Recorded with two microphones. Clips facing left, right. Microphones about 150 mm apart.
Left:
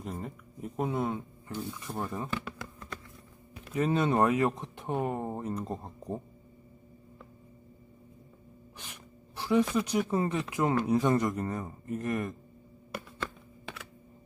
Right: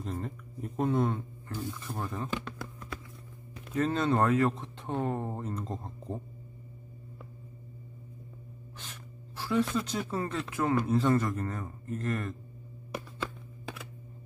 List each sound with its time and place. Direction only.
0.0 s speech: 10° left (ahead or behind)
3.5 s speech: 10° left (ahead or behind)
8.7 s gasp: 15° left (ahead or behind)
10.5 s speech: 15° left (ahead or behind)